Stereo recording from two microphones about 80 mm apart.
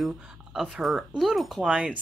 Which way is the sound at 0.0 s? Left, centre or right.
Centre.